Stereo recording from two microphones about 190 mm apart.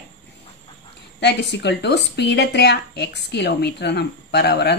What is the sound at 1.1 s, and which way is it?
A woman's voice, 65° left (ahead or behind).